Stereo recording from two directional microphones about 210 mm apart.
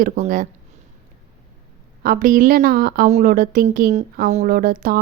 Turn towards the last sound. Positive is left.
turn(degrees=-45)  # may be behind; listen again after turning